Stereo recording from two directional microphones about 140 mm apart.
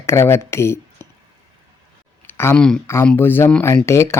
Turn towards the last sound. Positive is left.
turn(degrees=20)  # may be behind; listen again after turning